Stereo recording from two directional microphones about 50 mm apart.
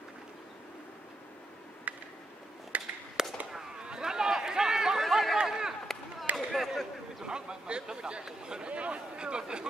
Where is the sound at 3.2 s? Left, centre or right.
Centre.